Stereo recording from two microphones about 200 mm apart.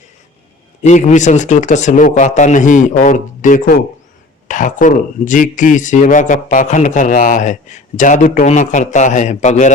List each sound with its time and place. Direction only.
0.8 s speech: 35° left (ahead or behind)